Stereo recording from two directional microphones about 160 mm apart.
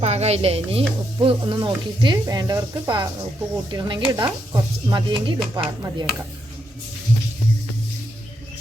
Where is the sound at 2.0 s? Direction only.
25° right (ahead or behind).